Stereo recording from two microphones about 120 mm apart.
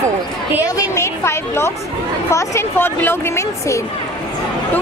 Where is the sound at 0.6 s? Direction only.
25° left (ahead or behind).